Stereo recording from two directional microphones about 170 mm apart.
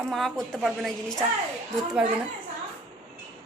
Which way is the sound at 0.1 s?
Centre (ahead or behind).